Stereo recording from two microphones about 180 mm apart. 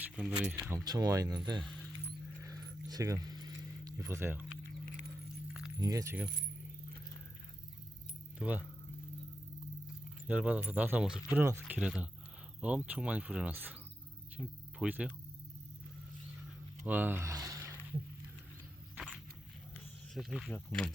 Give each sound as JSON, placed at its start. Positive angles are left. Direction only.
{"t": 0.0, "sound": "speech", "side_deg": -5}
{"t": 0.9, "sound": "speech", "side_deg": -20}
{"t": 2.4, "sound": "keys jangling", "side_deg": -20}
{"t": 5.8, "sound": "speech", "side_deg": -20}
{"t": 8.4, "sound": "speech", "side_deg": -10}
{"t": 10.2, "sound": "speech", "side_deg": -5}
{"t": 16.8, "sound": "a sound", "side_deg": -10}
{"t": 18.9, "sound": "walk", "side_deg": -5}
{"t": 20.1, "sound": "speech", "side_deg": 0}